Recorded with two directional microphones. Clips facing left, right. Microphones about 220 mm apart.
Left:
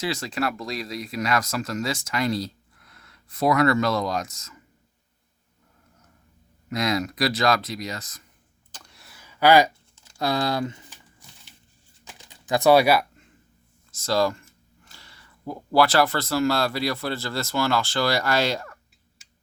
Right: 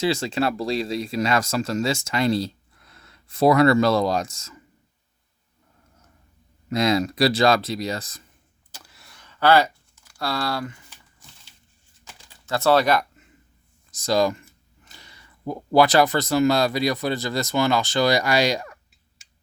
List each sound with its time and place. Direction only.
0.0 s speech: 25° right (ahead or behind)
6.7 s speech: 30° right (ahead or behind)
8.7 s typing: 5° right (ahead or behind); by 10.9 s 20° left (ahead or behind)
12.0 s typing: 15° left (ahead or behind)
13.9 s speech: 15° right (ahead or behind)